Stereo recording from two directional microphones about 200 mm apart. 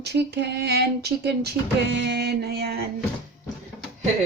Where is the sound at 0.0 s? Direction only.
55° right (ahead or behind).